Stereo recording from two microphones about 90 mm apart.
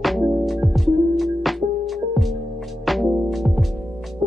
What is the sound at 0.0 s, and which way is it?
Music, centre (ahead or behind).